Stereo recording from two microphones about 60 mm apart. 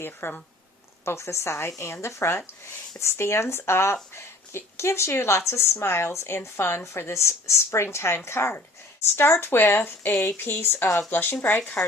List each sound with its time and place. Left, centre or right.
0.0 s speech: left
1.0 s speech: left